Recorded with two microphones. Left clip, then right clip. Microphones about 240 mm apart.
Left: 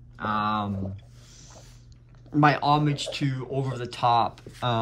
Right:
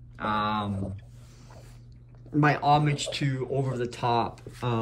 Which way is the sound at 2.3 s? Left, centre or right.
Centre.